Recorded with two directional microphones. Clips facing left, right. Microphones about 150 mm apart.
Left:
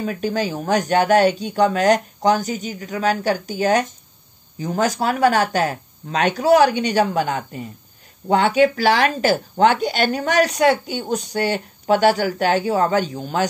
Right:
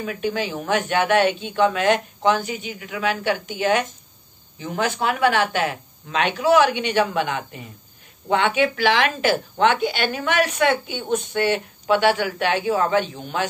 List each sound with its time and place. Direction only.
0.0 s a woman's voice: 40° left (ahead or behind)